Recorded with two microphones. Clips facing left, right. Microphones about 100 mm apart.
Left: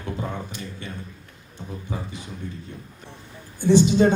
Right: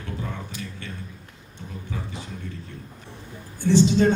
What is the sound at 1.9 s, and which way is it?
Speech, 20° left (ahead or behind).